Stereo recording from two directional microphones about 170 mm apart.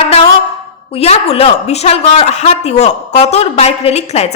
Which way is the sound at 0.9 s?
35° left (ahead or behind).